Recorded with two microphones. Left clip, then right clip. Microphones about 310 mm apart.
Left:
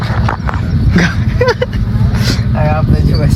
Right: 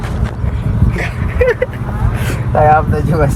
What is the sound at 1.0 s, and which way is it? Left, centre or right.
Dog, left.